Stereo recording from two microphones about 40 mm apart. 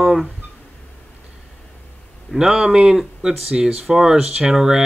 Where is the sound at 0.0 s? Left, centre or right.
Centre.